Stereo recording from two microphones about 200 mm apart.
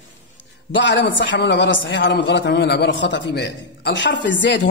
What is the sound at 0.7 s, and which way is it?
A man's voice, 65° left (ahead or behind).